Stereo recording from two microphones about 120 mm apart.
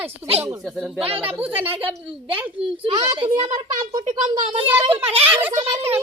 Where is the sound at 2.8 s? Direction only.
40° right (ahead or behind).